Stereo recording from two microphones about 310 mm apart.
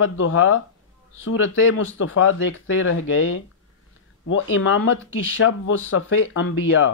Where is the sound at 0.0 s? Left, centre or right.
Left.